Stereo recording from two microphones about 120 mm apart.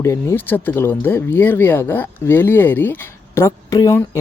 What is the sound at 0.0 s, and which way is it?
Speech, 25° left (ahead or behind).